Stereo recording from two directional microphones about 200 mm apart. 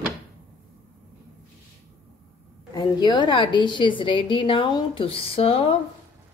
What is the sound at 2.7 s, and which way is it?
A woman's voice, 20° left (ahead or behind).